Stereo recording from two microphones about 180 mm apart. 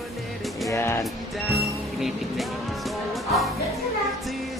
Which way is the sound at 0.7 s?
15° left (ahead or behind).